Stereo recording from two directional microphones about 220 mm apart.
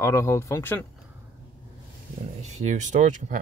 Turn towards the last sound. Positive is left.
turn(degrees=-35)  # may be behind; listen again after turning